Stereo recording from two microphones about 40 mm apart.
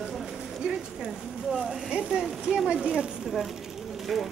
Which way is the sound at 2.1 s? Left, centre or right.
Centre.